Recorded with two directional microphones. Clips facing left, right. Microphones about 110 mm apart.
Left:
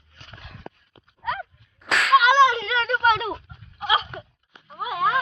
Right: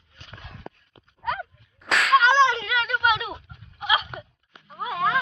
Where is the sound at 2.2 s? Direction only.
10° left (ahead or behind); by 3.3 s 35° left (ahead or behind).